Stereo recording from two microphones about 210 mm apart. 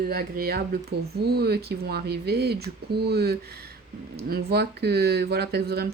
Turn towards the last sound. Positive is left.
turn(degrees=-50)  # may be behind; listen again after turning